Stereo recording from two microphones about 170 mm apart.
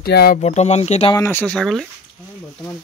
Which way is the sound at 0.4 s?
40° left (ahead or behind).